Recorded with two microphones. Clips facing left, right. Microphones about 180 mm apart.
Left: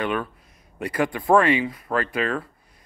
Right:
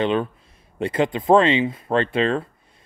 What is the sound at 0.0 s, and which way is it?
A man's voice, 25° right (ahead or behind).